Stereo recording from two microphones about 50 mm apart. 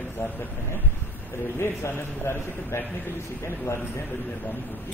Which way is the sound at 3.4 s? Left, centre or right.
Left.